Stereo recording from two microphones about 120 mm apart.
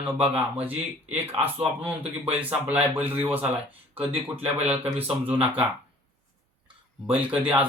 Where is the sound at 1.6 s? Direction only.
10° right (ahead or behind).